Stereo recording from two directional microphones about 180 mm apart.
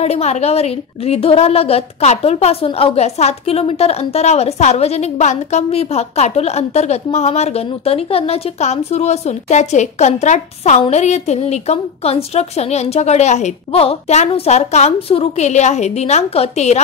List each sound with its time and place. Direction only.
0.0 s a woman's voice: 35° left (ahead or behind)